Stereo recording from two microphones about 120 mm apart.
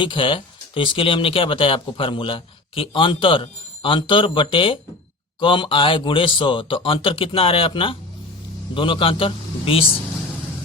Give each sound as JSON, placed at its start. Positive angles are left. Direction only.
{"t": 0.0, "sound": "speech", "side_deg": 45}